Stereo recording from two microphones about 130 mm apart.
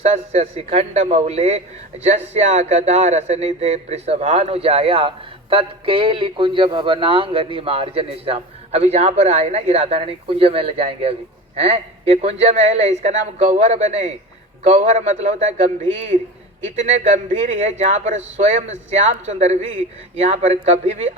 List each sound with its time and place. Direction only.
0.0 s speech: 55° right (ahead or behind)
16.7 s speech: 60° right (ahead or behind)